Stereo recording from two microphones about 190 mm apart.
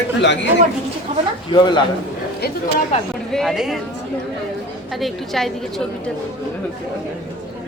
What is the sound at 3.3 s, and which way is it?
Speech, centre (ahead or behind).